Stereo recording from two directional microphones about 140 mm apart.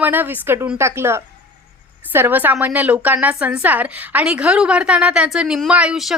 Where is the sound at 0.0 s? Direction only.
15° right (ahead or behind).